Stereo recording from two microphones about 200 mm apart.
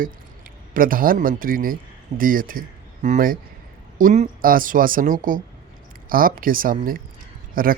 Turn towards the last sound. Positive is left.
turn(degrees=-45)  # may be behind; listen again after turning